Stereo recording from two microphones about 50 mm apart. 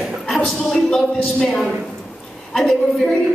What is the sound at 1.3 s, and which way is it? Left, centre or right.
A woman's voice, centre.